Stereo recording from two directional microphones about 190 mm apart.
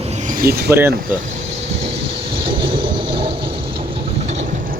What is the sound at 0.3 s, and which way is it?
Speech, 50° right (ahead or behind).